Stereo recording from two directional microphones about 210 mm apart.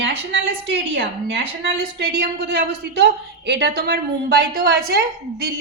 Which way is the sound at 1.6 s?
50° right (ahead or behind).